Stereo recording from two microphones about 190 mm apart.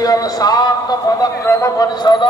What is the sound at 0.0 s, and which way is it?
A man's voice, 20° left (ahead or behind).